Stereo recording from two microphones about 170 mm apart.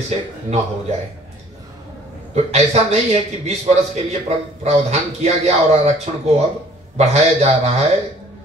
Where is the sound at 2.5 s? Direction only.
40° right (ahead or behind).